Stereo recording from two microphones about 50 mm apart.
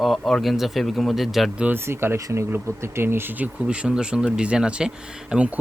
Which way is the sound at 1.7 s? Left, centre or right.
Right.